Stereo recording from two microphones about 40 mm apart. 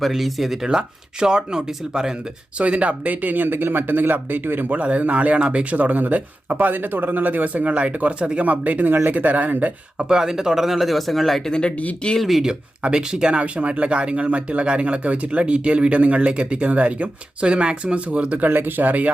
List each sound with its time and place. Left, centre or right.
0.1 s speech: centre
2.6 s speech: right
4.7 s speech: right
8.9 s speech: right
10.0 s speech: centre
11.4 s speech: centre
13.0 s speech: centre
13.4 s speech: right
16.6 s speech: right
18.4 s speech: right